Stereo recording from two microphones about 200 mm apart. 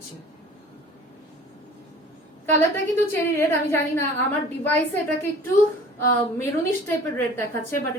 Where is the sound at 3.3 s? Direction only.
15° left (ahead or behind).